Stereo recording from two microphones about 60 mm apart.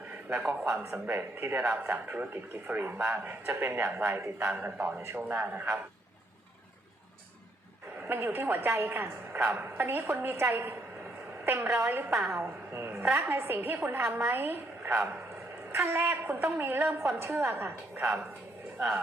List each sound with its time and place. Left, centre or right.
0.3 s a woman's voice: right
0.6 s speech: right
0.9 s a woman's voice: right
5.4 s a woman's voice: right
8.0 s a woman's voice: right
12.1 s a woman's voice: right
17.2 s a man's voice: right
17.5 s a woman's voice: right